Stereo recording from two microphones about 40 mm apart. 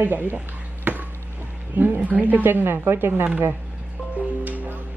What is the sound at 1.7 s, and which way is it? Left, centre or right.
A woman's voice, right.